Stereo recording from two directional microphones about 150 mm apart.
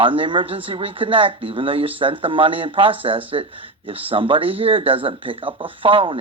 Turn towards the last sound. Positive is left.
turn(degrees=-35)  # may be behind; listen again after turning